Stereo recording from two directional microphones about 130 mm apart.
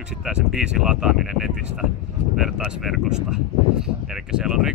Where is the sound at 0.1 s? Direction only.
5° right (ahead or behind).